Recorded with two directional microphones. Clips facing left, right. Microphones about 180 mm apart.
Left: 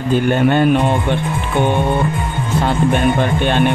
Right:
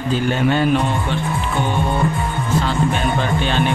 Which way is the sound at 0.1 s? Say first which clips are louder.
Left 4 dB; 55° left (ahead or behind).